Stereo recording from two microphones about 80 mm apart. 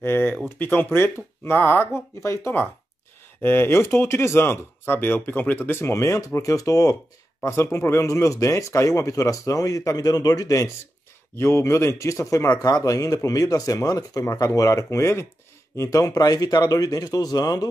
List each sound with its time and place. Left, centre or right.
0.0 s speech: left
7.4 s speech: left
11.3 s speech: left